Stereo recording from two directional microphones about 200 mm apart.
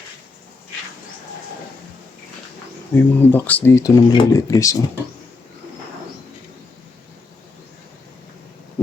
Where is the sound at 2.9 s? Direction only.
10° left (ahead or behind).